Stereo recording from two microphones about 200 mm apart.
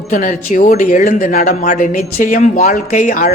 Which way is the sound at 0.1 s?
40° left (ahead or behind).